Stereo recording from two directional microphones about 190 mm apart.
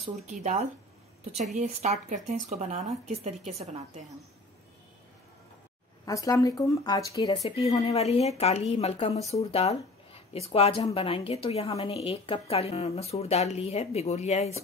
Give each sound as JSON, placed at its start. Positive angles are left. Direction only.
{"t": 0.0, "sound": "speech", "side_deg": -40}
{"t": 6.0, "sound": "speech", "side_deg": 20}
{"t": 7.4, "sound": "a woman's voice", "side_deg": 30}